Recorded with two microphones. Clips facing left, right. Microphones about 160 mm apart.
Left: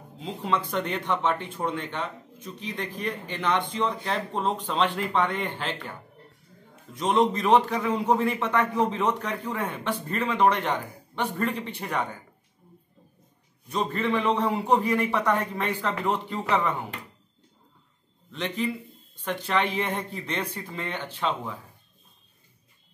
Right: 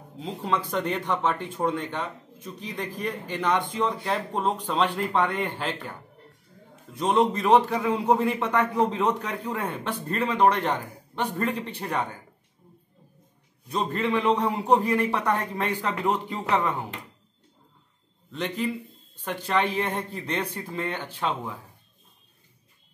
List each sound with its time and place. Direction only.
0.2 s speech: 5° right (ahead or behind)
7.0 s a man's voice: 10° right (ahead or behind)
13.7 s a man's voice: centre (ahead or behind)
18.3 s speech: 10° right (ahead or behind)